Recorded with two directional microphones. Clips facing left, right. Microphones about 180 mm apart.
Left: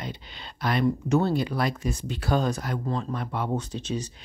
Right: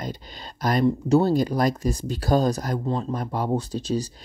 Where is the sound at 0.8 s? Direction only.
35° right (ahead or behind).